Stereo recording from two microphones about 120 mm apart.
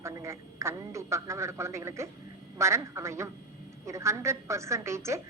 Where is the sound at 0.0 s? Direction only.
25° right (ahead or behind).